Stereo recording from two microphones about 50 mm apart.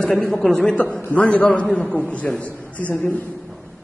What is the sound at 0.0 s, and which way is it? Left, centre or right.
Speech, left.